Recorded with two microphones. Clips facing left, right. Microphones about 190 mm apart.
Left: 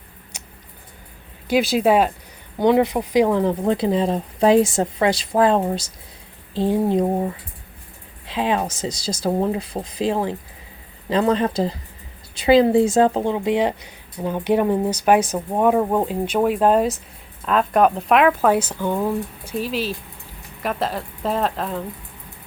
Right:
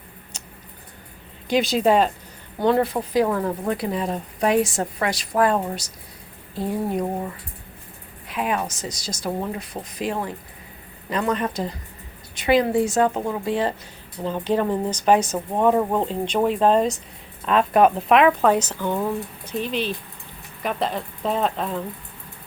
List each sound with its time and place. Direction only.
1.5 s speech: 5° left (ahead or behind); by 13.4 s 30° left (ahead or behind)
13.4 s speech: 20° left (ahead or behind); by 21.8 s centre (ahead or behind)